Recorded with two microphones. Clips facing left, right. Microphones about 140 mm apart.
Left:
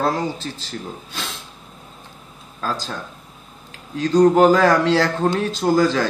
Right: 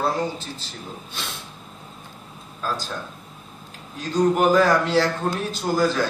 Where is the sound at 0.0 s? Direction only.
90° left.